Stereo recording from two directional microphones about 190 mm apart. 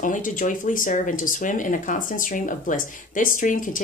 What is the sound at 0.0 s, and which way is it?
Speech, 45° left (ahead or behind).